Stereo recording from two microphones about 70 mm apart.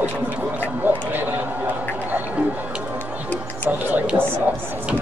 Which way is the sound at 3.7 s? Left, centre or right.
Right.